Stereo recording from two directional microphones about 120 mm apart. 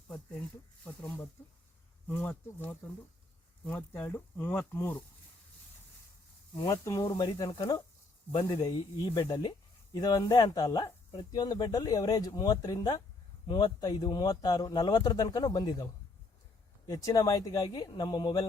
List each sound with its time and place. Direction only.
2.0 s speech: 15° left (ahead or behind)
6.6 s speech: 30° left (ahead or behind)